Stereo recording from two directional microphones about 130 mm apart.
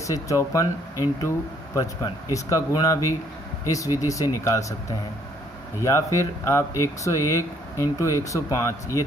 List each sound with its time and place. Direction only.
0.0 s speech: 25° left (ahead or behind)
2.3 s speech: 25° left (ahead or behind)
5.8 s speech: 20° left (ahead or behind)